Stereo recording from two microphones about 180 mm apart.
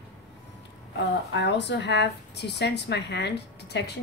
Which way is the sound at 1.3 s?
70° left (ahead or behind).